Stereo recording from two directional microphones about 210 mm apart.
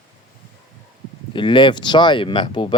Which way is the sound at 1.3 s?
25° left (ahead or behind).